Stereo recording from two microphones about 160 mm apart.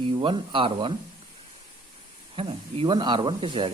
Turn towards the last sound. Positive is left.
turn(degrees=-30)  # may be behind; listen again after turning